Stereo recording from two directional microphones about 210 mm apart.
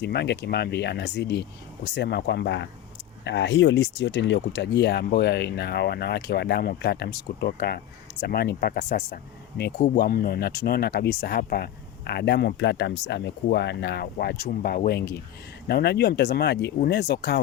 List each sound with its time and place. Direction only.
0.0 s speech: 55° left (ahead or behind)